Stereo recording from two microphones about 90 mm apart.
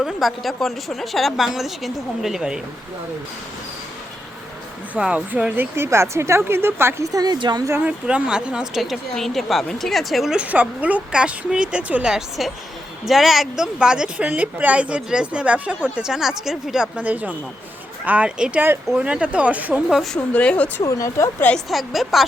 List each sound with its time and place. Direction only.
0.0 s a woman's voice: centre (ahead or behind)
4.9 s speech: 15° right (ahead or behind)
5.7 s speech: 30° right (ahead or behind)
7.1 s a woman's voice: 45° right (ahead or behind)
7.3 s speech: 55° right (ahead or behind)
7.9 s a woman's voice: 10° right (ahead or behind)
10.4 s a woman's voice: 15° right (ahead or behind)
17.0 s speech: 15° right (ahead or behind)
20.3 s speech: 15° left (ahead or behind)
20.8 s speech: 35° left (ahead or behind)
21.7 s a woman's voice: centre (ahead or behind)